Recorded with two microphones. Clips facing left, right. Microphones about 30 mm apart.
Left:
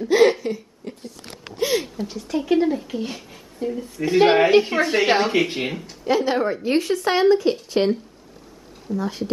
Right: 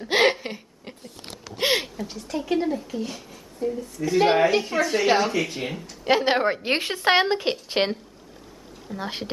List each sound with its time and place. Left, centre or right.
0.3 s hiccup: right
1.6 s a sound: right
2.0 s a woman's voice: centre; by 4.3 s left
4.4 s a woman's voice: left
6.0 s a woman's voice: right
8.9 s a woman's voice: right